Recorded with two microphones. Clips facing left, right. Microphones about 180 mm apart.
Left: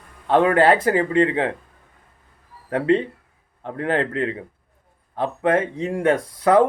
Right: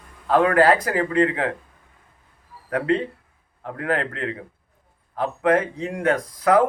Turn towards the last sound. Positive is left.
turn(degrees=30)  # may be behind; listen again after turning